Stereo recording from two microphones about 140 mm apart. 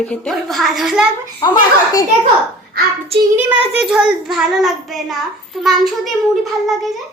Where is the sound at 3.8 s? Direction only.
5° right (ahead or behind).